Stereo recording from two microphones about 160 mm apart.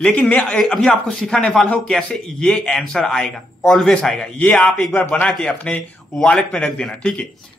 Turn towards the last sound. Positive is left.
turn(degrees=5)  # may be behind; listen again after turning